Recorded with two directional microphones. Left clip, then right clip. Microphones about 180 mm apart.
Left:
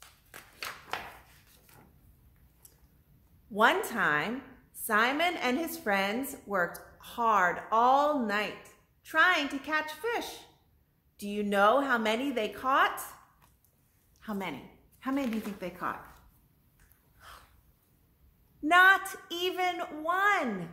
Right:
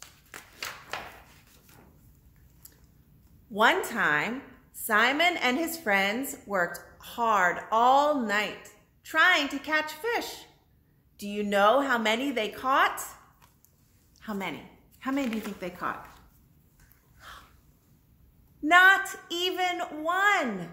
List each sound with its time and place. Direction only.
0.0 s a sound: 5° left (ahead or behind)
3.5 s a woman's voice: 15° left (ahead or behind)
14.2 s a woman's voice: 15° left (ahead or behind)
18.6 s a woman's voice: 15° left (ahead or behind)